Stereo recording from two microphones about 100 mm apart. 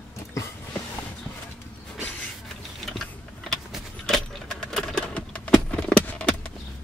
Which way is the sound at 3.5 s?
5° left (ahead or behind).